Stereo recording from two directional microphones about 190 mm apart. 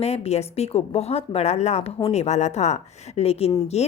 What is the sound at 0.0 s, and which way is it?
A woman's voice, 35° left (ahead or behind).